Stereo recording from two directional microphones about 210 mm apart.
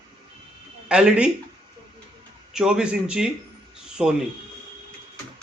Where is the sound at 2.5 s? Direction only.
5° right (ahead or behind).